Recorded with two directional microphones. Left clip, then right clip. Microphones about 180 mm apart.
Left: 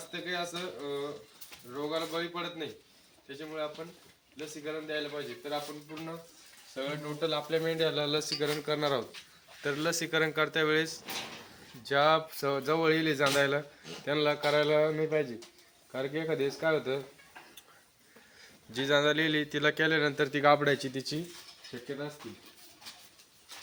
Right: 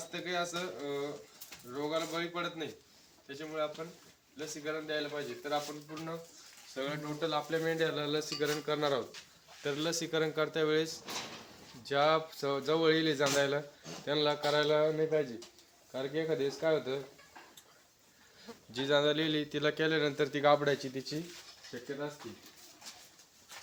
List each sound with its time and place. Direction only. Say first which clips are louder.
0.1 s speech: even; centre (ahead or behind)
6.7 s speech: left 1 dB; 25° left (ahead or behind)
7.2 s speech: left 3 dB; 50° left (ahead or behind)
9.6 s a man's voice: left 3 dB; 20° left (ahead or behind)
11.8 s speech: left 3 dB; 30° left (ahead or behind)
18.7 s a man's voice: left 2 dB; 20° left (ahead or behind)
20.6 s speech: left 3 dB; 55° left (ahead or behind)